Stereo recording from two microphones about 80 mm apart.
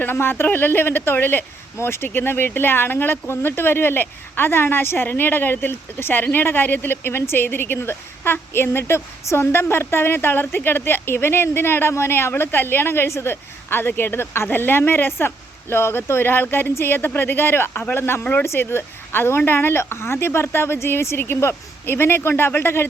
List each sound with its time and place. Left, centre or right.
0.0 s a man's voice: left